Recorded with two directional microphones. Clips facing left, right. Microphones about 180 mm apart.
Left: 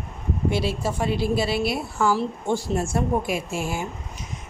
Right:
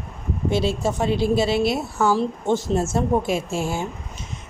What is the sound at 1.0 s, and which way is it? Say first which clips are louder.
Speech: right 3 dB; 5° left (ahead or behind).